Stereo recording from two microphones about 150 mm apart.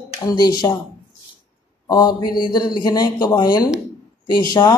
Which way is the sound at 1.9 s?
30° left (ahead or behind).